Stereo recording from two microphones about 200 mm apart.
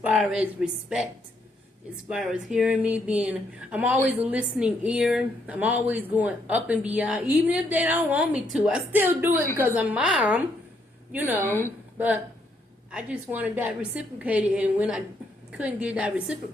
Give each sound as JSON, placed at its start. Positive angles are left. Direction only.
{"t": 0.0, "sound": "speech", "side_deg": -5}
{"t": 2.0, "sound": "speech", "side_deg": -5}
{"t": 12.9, "sound": "speech", "side_deg": -5}